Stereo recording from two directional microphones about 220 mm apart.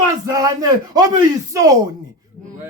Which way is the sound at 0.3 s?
15° right (ahead or behind).